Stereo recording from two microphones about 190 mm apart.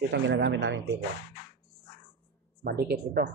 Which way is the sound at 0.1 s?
70° right (ahead or behind).